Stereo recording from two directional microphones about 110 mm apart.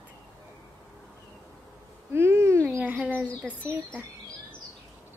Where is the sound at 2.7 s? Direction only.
10° right (ahead or behind).